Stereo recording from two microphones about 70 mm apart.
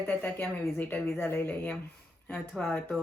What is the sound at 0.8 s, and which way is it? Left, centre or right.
Speech, left.